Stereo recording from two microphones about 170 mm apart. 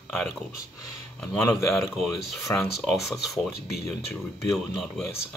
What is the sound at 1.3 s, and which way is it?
Speech, 15° left (ahead or behind).